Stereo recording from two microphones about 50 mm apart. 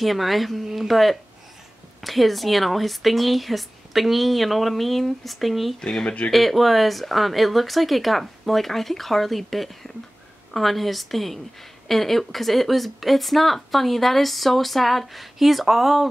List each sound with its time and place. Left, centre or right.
0.0 s speech: centre
6.0 s speech: left
6.3 s speech: centre